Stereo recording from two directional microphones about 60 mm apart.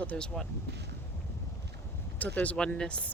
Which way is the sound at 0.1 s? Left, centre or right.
Centre.